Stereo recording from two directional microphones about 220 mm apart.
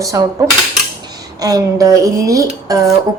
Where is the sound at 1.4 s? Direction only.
15° right (ahead or behind).